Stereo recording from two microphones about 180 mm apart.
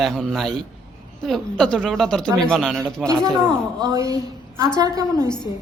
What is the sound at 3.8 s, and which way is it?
A woman's voice, 20° right (ahead or behind).